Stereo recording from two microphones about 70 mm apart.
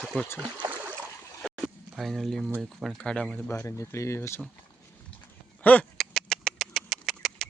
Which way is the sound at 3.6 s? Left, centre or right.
Left.